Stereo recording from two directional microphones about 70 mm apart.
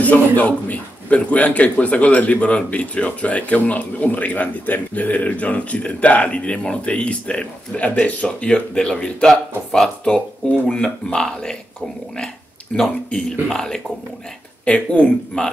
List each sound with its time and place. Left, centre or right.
0.0 s a man's voice: left
12.7 s speech: centre